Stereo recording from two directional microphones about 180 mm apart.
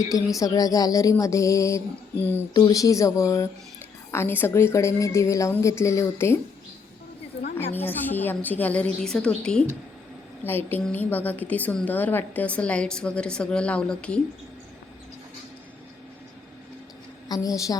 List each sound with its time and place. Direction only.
0.3 s a woman's voice: 20° left (ahead or behind)
2.5 s a woman's voice: 20° left (ahead or behind)
7.7 s a woman's voice: 10° left (ahead or behind)
17.2 s a woman's voice: 20° left (ahead or behind)